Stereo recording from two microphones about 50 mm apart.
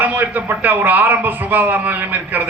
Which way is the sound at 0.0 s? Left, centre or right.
Right.